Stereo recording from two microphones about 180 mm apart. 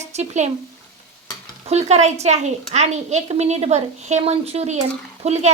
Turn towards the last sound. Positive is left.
turn(degrees=-40)  # may be behind; listen again after turning